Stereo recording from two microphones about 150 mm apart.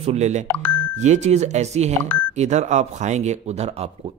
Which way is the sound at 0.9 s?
50° right (ahead or behind).